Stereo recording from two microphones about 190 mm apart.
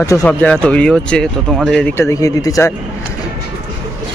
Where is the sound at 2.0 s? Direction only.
15° left (ahead or behind).